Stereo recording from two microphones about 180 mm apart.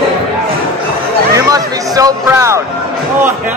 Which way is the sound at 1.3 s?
20° right (ahead or behind).